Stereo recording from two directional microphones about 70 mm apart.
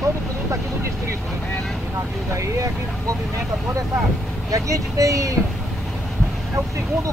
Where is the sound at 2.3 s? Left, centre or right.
Right.